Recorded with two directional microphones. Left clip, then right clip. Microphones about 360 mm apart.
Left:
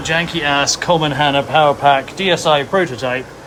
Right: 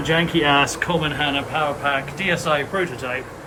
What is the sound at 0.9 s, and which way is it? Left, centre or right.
Speech, centre.